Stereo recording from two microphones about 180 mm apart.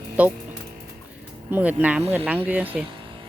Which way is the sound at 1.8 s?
10° right (ahead or behind).